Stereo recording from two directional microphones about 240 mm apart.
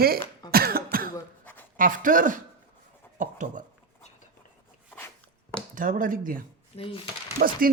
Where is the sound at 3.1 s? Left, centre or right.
Right.